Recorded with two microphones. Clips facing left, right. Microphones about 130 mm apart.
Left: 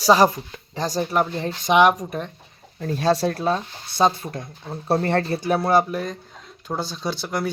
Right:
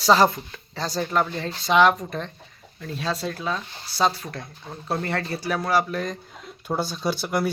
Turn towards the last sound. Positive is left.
turn(degrees=-5)  # may be behind; listen again after turning